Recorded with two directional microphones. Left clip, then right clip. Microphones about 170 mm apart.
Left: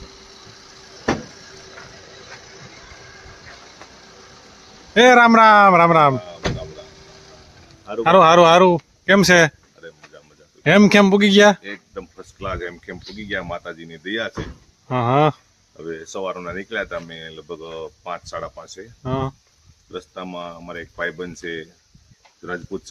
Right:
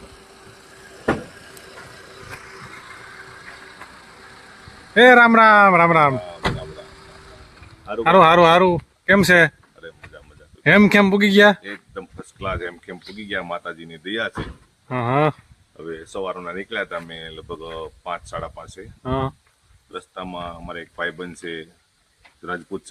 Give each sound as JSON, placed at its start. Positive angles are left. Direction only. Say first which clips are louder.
{"t": 4.9, "sound": "speech", "louder": "even", "side_deg": 10}
{"t": 7.9, "sound": "speech", "louder": "left 1 dB", "side_deg": 5}
{"t": 11.6, "sound": "a sound", "louder": "left 1 dB", "side_deg": 10}
{"t": 13.2, "sound": "speech", "louder": "even", "side_deg": 10}
{"t": 16.0, "sound": "speech", "louder": "even", "side_deg": 50}
{"t": 17.1, "sound": "speech", "louder": "even", "side_deg": 10}
{"t": 19.0, "sound": "speech", "louder": "right 1 dB", "side_deg": -5}
{"t": 19.9, "sound": "speech", "louder": "even", "side_deg": 20}